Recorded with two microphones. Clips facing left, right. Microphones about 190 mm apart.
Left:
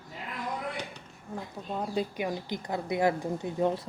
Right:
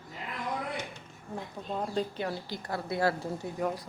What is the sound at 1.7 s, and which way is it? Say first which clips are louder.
Speech: left 1 dB; 5° left (ahead or behind).